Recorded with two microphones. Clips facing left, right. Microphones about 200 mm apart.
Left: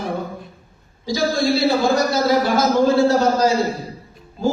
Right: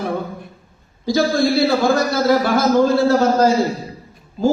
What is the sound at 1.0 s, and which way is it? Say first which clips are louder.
A man's voice: right 3 dB; 55° right (ahead or behind).